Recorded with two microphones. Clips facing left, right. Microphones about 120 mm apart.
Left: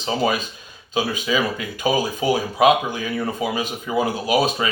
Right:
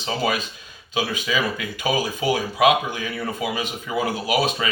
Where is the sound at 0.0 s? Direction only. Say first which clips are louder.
Left 3 dB; 40° left (ahead or behind).